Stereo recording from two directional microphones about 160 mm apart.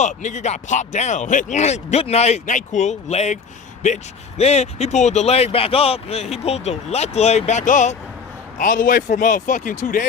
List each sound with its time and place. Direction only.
0.0 s speech: 50° left (ahead or behind)